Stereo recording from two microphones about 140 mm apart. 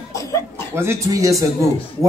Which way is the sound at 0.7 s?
20° right (ahead or behind).